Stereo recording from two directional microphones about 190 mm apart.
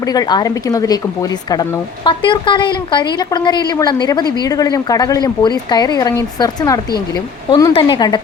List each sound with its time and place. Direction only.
0.1 s a woman's voice: 20° left (ahead or behind)
2.0 s a woman's voice: 25° left (ahead or behind)